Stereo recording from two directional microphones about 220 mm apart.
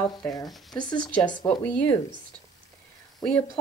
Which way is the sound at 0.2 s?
15° left (ahead or behind).